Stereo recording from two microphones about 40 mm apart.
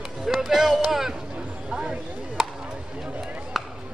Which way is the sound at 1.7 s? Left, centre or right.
Right.